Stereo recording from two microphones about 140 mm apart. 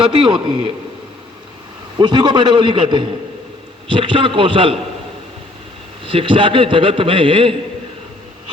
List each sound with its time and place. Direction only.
0.0 s a man's voice: 35° right (ahead or behind)
2.0 s a man's voice: 35° right (ahead or behind)
6.1 s a man's voice: 40° right (ahead or behind)